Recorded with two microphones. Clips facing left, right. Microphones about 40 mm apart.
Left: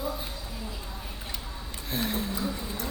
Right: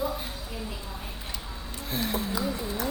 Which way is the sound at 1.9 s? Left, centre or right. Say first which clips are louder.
Right 1 dB; centre.